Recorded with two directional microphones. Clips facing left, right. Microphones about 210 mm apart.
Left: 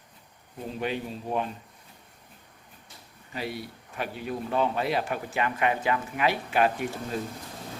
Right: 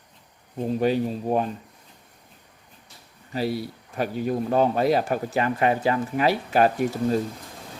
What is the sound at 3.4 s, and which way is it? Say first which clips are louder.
Speech: right 8 dB; 35° right (ahead or behind).